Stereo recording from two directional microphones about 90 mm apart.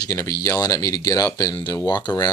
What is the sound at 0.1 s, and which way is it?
Speech, 40° left (ahead or behind).